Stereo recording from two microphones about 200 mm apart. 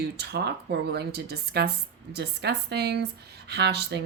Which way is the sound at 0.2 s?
55° right (ahead or behind).